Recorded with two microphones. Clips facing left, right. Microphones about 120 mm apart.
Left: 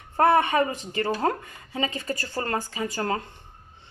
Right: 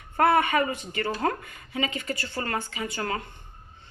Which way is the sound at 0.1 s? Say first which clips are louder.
Left 1 dB; 30° left (ahead or behind).